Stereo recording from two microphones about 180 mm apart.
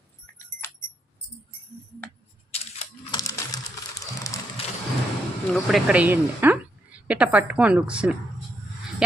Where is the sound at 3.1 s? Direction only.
20° left (ahead or behind).